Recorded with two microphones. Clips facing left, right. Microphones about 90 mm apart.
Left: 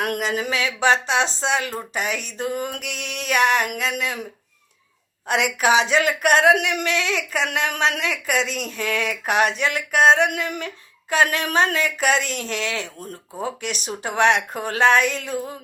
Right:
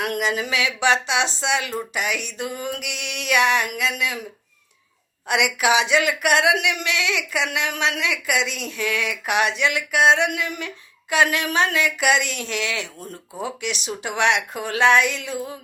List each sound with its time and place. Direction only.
0.0 s speech: 40° left (ahead or behind)
5.3 s speech: 40° left (ahead or behind)